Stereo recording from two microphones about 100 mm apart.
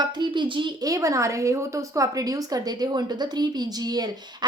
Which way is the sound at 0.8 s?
35° right (ahead or behind).